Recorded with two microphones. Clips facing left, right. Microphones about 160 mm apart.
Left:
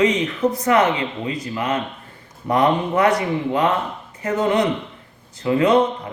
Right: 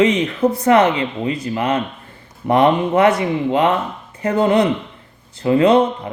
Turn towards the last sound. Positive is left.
turn(degrees=-30)  # may be behind; listen again after turning